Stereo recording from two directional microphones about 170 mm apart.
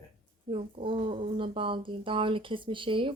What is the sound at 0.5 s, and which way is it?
Speech, 30° right (ahead or behind).